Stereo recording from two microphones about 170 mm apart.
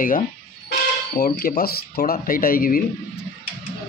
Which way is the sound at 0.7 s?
60° left (ahead or behind).